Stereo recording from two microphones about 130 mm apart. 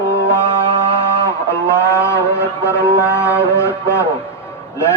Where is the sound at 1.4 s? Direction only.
20° left (ahead or behind).